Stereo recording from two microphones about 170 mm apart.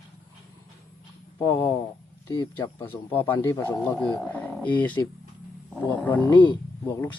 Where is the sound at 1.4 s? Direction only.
15° left (ahead or behind).